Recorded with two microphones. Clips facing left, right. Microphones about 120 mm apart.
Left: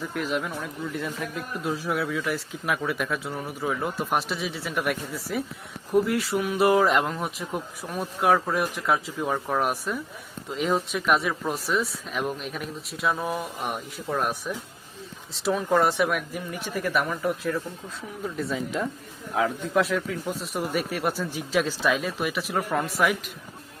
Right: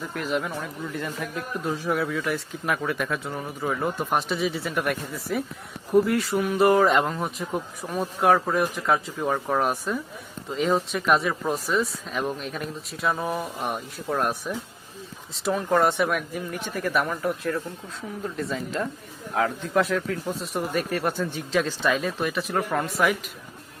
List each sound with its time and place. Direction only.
0.0 s speech: centre (ahead or behind)